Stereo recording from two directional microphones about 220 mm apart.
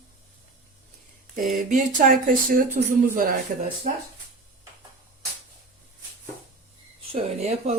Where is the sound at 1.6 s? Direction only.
35° right (ahead or behind).